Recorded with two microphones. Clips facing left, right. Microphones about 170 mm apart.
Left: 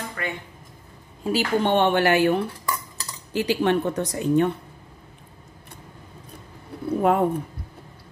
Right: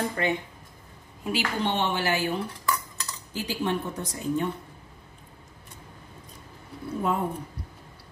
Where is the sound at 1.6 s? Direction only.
55° left (ahead or behind).